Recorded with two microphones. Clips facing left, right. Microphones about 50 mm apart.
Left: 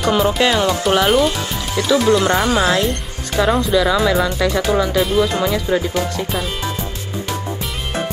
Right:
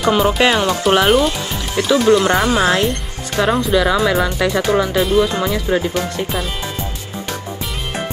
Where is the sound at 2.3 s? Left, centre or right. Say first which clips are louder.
Right 1 dB; centre.